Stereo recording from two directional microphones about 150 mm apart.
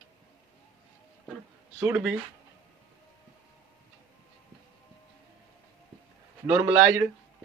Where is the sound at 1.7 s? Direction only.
10° right (ahead or behind).